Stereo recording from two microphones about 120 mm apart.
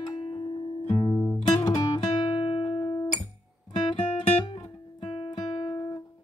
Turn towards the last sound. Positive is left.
turn(degrees=35)  # may be behind; listen again after turning